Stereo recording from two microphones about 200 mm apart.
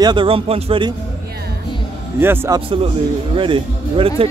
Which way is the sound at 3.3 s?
25° right (ahead or behind).